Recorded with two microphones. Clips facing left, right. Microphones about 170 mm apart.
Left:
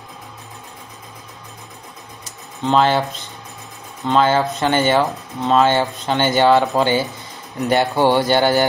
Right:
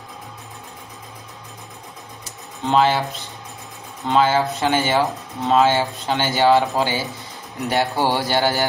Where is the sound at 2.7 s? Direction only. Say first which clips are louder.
Left 2 dB; 5° right (ahead or behind).